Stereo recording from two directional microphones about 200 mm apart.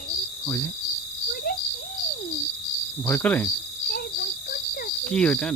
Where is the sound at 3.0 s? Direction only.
10° left (ahead or behind).